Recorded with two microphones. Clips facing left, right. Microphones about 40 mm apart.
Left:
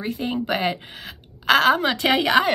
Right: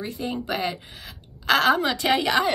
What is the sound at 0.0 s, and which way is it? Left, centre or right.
A woman's voice, left.